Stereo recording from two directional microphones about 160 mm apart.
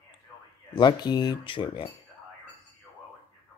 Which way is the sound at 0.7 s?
30° left (ahead or behind).